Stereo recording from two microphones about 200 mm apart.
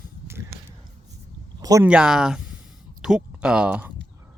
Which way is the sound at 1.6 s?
15° right (ahead or behind).